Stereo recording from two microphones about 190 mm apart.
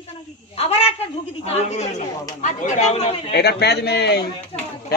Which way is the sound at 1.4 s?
35° left (ahead or behind).